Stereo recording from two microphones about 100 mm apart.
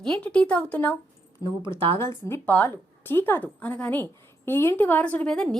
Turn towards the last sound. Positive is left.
turn(degrees=10)  # may be behind; listen again after turning